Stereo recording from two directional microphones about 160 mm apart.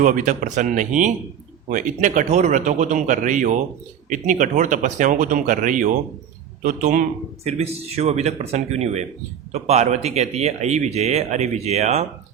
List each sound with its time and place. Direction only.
0.0 s speech: 55° right (ahead or behind)
7.4 s speech: 40° right (ahead or behind)